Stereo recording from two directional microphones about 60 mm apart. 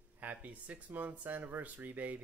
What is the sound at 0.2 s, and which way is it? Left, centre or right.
Speech, right.